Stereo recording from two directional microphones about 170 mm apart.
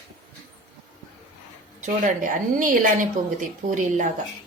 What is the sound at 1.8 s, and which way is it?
A woman's voice, 50° right (ahead or behind).